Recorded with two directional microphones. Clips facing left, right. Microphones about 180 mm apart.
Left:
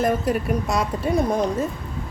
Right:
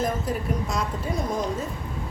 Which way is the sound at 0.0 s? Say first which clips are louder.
Left 5 dB; 70° left (ahead or behind).